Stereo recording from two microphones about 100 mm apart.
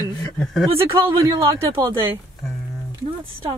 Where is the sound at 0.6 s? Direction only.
70° right (ahead or behind).